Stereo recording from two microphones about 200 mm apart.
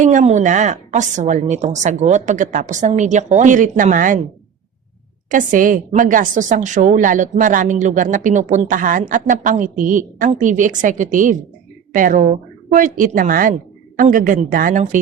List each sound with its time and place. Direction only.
0.0 s a woman's voice: 35° right (ahead or behind)
5.3 s a woman's voice: 40° right (ahead or behind)